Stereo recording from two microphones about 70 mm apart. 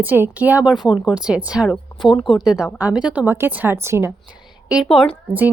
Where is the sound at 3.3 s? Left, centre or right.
Right.